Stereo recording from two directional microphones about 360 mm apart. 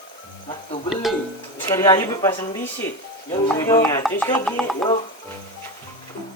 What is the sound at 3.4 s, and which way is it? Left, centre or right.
Music, centre.